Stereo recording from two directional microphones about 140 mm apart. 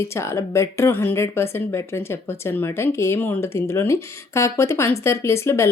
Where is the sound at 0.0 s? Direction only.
20° left (ahead or behind).